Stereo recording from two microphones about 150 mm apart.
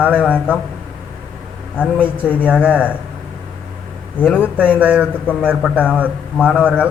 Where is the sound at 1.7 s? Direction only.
10° left (ahead or behind).